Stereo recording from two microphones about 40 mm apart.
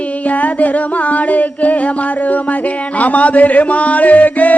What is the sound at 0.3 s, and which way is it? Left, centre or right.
Music, left.